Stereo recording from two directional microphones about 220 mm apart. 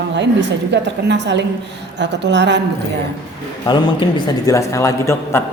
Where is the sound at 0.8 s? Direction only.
50° right (ahead or behind).